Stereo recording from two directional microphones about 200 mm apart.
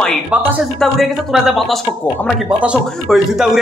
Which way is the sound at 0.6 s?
Centre (ahead or behind).